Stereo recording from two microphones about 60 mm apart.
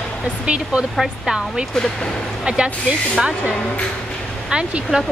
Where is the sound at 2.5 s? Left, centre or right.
Centre.